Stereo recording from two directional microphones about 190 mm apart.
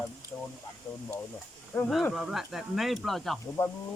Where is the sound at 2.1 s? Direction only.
Centre (ahead or behind).